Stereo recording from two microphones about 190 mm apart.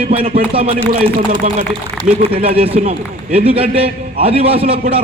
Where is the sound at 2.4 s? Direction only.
30° right (ahead or behind).